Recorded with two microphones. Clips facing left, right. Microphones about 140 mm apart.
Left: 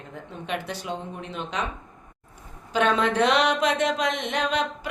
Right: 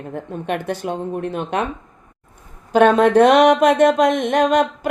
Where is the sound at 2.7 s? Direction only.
50° right (ahead or behind).